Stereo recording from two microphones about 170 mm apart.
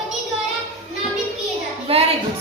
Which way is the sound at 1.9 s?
35° right (ahead or behind).